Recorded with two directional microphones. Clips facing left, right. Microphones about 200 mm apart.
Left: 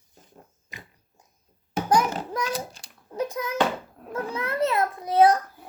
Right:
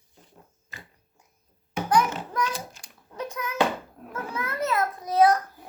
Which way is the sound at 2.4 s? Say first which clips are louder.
Left 3 dB; 35° left (ahead or behind).